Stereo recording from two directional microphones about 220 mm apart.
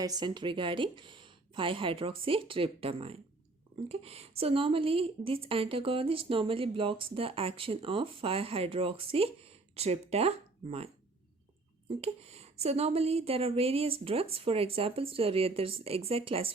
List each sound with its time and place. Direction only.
0.0 s a woman's voice: 20° right (ahead or behind)
11.9 s a woman's voice: 30° right (ahead or behind)